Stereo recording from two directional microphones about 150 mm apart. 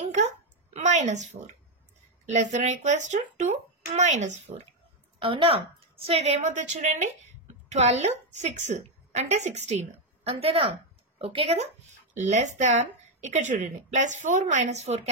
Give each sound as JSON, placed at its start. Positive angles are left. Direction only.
{"t": 0.7, "sound": "a sound", "side_deg": -50}
{"t": 2.2, "sound": "speech", "side_deg": -50}
{"t": 5.2, "sound": "a woman's voice", "side_deg": -40}